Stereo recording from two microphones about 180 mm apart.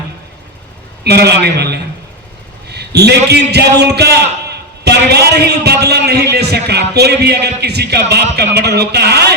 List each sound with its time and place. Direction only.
1.0 s a man's voice: 65° right (ahead or behind)